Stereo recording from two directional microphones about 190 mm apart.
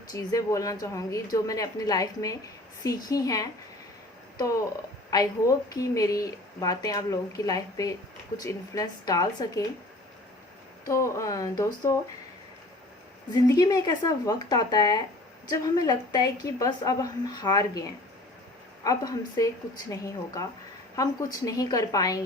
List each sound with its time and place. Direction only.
0.1 s a woman's voice: 15° left (ahead or behind)
5.1 s a woman's voice: 20° left (ahead or behind)
10.8 s a woman's voice: 15° left (ahead or behind)
13.3 s a woman's voice: 20° left (ahead or behind)
18.9 s a woman's voice: 20° left (ahead or behind)
20.9 s a woman's voice: 20° left (ahead or behind)